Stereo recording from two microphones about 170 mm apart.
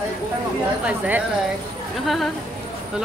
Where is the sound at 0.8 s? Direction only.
5° right (ahead or behind).